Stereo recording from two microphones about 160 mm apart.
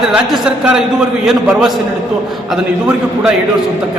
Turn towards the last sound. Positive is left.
turn(degrees=-5)  # may be behind; listen again after turning